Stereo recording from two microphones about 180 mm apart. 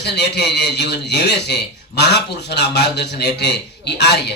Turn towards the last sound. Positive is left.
turn(degrees=70)  # may be behind; listen again after turning